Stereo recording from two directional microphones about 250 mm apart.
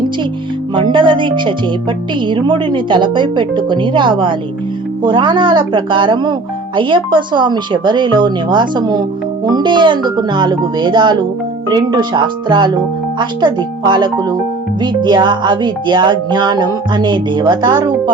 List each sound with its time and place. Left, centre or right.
0.7 s a woman's voice: centre